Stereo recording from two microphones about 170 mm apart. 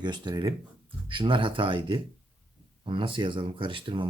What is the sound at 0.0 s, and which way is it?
Speech, 25° right (ahead or behind).